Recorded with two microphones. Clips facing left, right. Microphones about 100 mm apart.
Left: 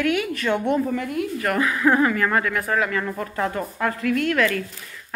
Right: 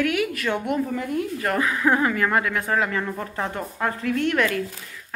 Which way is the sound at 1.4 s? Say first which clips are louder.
Left 3 dB; 15° right (ahead or behind).